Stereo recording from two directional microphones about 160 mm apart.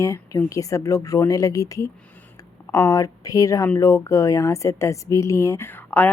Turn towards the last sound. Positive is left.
turn(degrees=10)  # may be behind; listen again after turning